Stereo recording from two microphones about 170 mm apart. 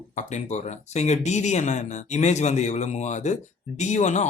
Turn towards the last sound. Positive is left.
turn(degrees=45)  # may be behind; listen again after turning